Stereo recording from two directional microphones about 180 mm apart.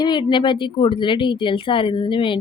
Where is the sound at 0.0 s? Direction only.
25° left (ahead or behind).